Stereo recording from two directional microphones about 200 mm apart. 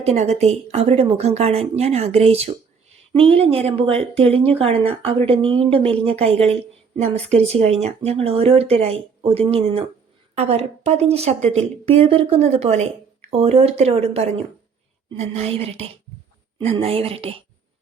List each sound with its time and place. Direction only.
0.0 s a woman's voice: 30° right (ahead or behind)